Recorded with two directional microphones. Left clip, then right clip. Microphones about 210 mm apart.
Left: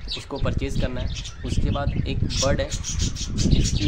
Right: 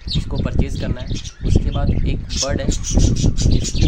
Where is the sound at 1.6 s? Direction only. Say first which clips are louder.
Right 2 dB; 5° left (ahead or behind).